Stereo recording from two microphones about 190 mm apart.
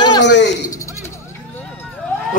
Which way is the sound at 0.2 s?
65° left (ahead or behind).